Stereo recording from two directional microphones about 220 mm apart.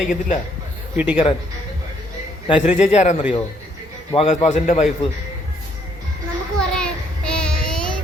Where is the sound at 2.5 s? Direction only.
30° left (ahead or behind).